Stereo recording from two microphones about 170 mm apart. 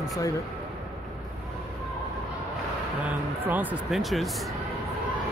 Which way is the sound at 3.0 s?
10° right (ahead or behind).